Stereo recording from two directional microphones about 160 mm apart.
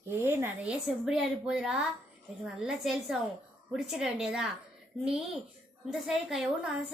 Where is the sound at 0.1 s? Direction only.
15° right (ahead or behind).